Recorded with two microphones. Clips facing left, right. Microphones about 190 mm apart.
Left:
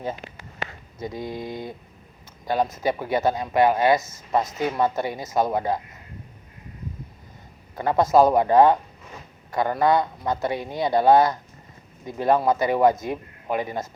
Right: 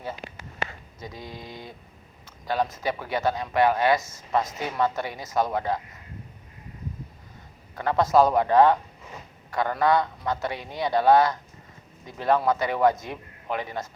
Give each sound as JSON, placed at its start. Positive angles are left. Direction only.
{"t": 0.9, "sound": "speech", "side_deg": 55}
{"t": 2.8, "sound": "a man's voice", "side_deg": 15}
{"t": 7.8, "sound": "a man's voice", "side_deg": 15}